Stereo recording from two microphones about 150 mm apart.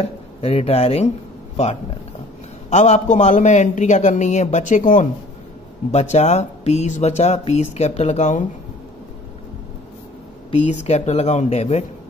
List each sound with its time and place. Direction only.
0.0 s speech: 40° left (ahead or behind)
2.7 s speech: 50° left (ahead or behind)
10.7 s speech: 50° left (ahead or behind)